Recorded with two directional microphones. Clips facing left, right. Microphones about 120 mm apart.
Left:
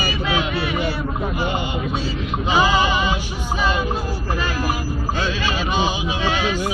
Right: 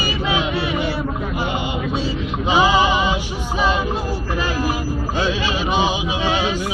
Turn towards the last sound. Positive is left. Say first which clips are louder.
# right 1 dB
turn(degrees=-20)  # may be behind; listen again after turning